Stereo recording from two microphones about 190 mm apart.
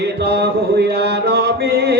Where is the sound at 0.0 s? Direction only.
60° right (ahead or behind).